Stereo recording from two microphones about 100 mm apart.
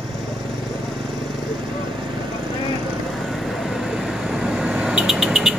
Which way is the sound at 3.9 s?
5° right (ahead or behind).